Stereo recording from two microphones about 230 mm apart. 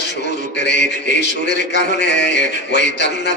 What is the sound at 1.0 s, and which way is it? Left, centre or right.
A man's voice, left.